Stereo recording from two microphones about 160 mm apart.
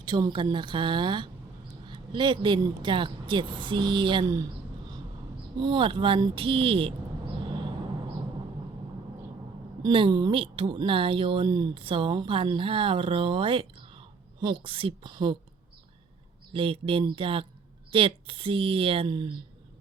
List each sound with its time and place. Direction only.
0.0 s a woman's voice: 30° right (ahead or behind)
5.5 s speech: 30° right (ahead or behind)
9.8 s a woman's voice: 30° right (ahead or behind)
16.5 s speech: 35° right (ahead or behind)